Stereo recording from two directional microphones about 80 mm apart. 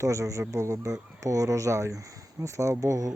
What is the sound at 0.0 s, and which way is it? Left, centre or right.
Speech, right.